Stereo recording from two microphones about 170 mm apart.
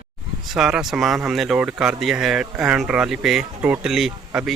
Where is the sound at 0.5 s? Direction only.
Centre (ahead or behind).